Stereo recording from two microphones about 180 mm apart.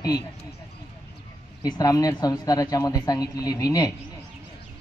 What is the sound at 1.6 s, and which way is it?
Speech, 20° left (ahead or behind).